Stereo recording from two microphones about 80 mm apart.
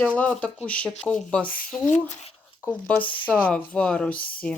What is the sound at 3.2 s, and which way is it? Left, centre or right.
Speech, centre.